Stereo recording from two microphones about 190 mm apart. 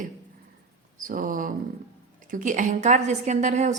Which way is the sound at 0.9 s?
45° right (ahead or behind).